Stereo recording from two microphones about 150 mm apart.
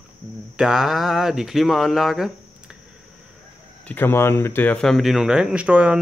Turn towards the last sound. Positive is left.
turn(degrees=-10)  # may be behind; listen again after turning